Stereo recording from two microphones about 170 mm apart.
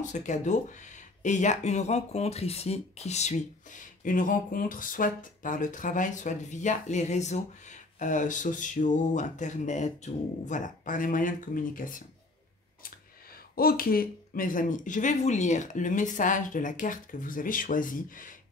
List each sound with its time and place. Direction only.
0.0 s speech: 45° left (ahead or behind)
13.6 s speech: 60° left (ahead or behind)